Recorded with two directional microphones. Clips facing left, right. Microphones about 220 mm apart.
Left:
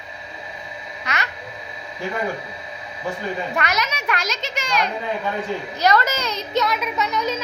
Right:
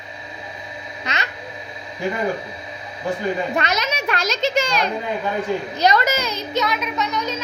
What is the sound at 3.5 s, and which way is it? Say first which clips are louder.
A child's voice: right 2 dB; 20° right (ahead or behind).